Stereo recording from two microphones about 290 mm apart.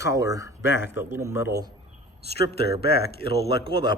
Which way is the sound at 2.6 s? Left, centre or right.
Left.